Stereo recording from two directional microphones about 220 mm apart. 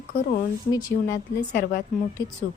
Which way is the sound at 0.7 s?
15° left (ahead or behind).